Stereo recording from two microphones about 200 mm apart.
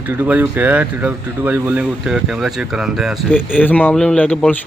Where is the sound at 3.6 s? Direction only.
10° left (ahead or behind).